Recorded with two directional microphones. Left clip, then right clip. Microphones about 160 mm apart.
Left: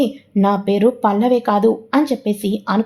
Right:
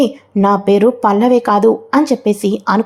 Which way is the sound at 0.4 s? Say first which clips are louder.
Right 5 dB; 20° right (ahead or behind).